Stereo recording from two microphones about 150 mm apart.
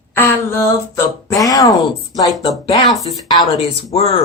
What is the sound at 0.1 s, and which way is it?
Speech, 15° left (ahead or behind).